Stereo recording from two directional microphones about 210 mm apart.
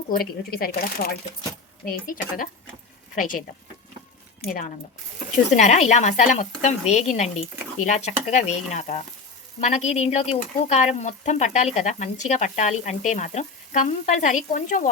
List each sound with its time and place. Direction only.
0.1 s speech: 45° left (ahead or behind)
5.5 s speech: 35° left (ahead or behind)